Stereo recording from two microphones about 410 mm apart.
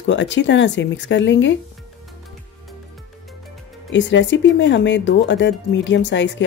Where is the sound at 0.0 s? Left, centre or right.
Left.